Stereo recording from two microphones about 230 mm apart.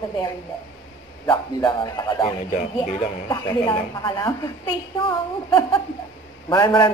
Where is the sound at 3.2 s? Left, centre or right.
Centre.